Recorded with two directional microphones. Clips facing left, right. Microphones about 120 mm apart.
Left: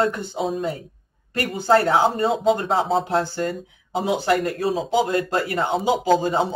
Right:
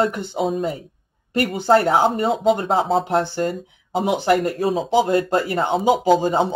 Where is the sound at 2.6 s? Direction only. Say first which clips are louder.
Right 2 dB; 30° right (ahead or behind).